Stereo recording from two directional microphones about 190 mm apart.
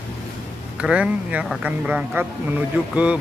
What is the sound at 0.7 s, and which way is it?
Speech, 5° right (ahead or behind).